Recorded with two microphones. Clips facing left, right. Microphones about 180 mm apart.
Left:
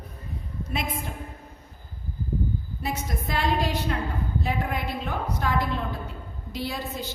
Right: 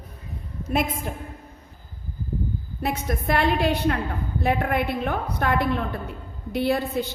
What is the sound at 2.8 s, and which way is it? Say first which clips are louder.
A woman's voice: right 7 dB; 65° right (ahead or behind).